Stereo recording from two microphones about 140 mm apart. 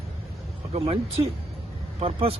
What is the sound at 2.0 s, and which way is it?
Speech, 45° right (ahead or behind).